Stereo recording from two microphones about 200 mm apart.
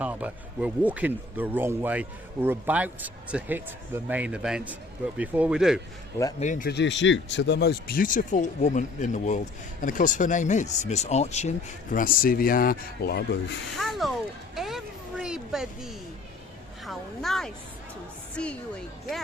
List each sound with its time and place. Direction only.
0.0 s speech: 5° right (ahead or behind)
6.4 s speech: 40° left (ahead or behind)
6.7 s speech: 60° left (ahead or behind)
13.7 s speech: centre (ahead or behind)
14.5 s a sound: centre (ahead or behind)
16.8 s speech: centre (ahead or behind)